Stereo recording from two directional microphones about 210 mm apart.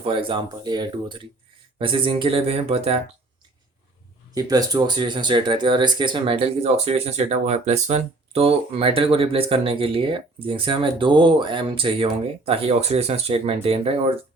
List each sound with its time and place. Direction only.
0.0 s speech: 25° right (ahead or behind)
4.4 s speech: 15° right (ahead or behind)